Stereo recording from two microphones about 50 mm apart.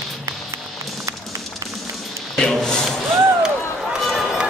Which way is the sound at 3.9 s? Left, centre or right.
Centre.